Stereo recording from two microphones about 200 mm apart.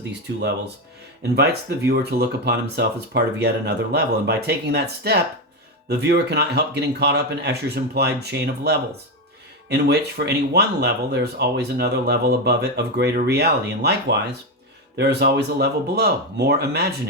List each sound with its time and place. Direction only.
1.4 s speech: 55° right (ahead or behind)